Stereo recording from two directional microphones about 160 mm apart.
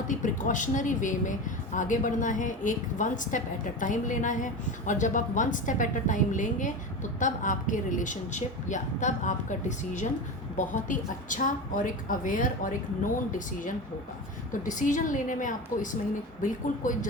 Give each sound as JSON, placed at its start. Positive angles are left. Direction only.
{"t": 0.1, "sound": "a woman's voice", "side_deg": 50}